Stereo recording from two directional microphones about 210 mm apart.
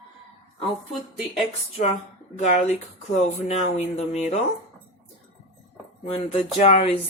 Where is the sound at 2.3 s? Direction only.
35° left (ahead or behind).